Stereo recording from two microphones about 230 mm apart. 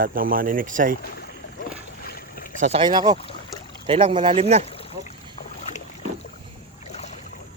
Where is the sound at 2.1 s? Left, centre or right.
Left.